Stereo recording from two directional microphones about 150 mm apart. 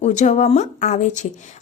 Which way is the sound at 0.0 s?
50° left (ahead or behind).